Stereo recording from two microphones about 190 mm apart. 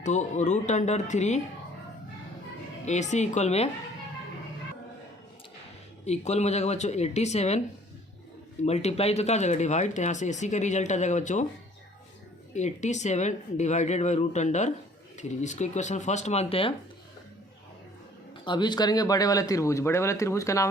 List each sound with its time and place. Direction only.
0.0 s speech: 40° left (ahead or behind)
2.8 s speech: 40° left (ahead or behind)
6.1 s speech: 35° left (ahead or behind)
8.6 s speech: 35° left (ahead or behind)
12.5 s speech: 40° left (ahead or behind)
18.4 s speech: 25° left (ahead or behind)